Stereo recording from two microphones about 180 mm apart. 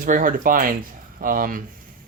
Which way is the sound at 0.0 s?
50° right (ahead or behind).